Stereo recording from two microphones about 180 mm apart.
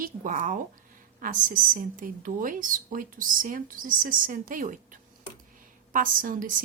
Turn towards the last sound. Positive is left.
turn(degrees=-50)  # may be behind; listen again after turning